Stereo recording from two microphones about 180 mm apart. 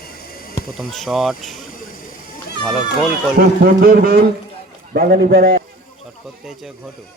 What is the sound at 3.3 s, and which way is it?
Speech, 55° right (ahead or behind).